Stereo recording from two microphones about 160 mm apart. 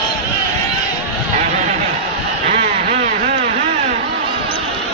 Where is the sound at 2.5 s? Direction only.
45° right (ahead or behind).